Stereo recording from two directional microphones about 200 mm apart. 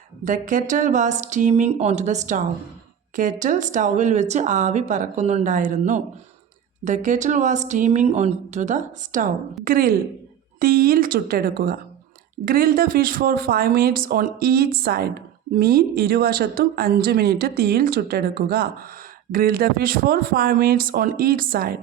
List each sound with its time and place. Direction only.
0.3 s speech: 40° right (ahead or behind)